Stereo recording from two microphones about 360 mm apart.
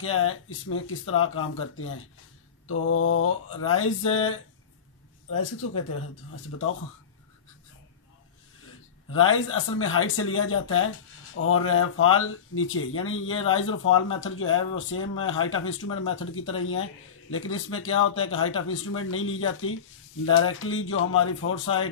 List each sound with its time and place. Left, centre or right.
0.0 s speech: left
9.1 s speech: left